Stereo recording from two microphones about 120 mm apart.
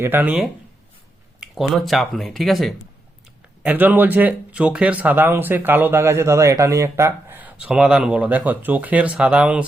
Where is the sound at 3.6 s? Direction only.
15° right (ahead or behind).